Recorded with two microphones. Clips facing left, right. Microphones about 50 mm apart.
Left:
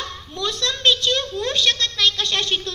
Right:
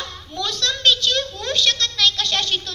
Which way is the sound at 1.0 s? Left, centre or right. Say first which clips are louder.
Left 1 dB; left.